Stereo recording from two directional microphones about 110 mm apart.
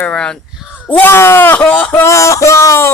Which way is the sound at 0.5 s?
5° right (ahead or behind).